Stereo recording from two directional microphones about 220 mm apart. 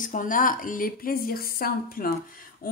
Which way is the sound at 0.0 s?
35° left (ahead or behind).